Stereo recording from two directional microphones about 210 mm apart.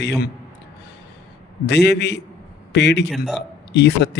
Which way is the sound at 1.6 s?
55° left (ahead or behind).